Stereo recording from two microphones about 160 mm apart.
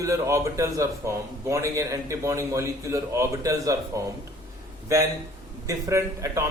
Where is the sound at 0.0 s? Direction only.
20° right (ahead or behind).